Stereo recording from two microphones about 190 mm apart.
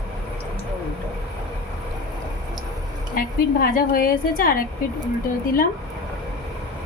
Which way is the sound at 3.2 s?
50° left (ahead or behind).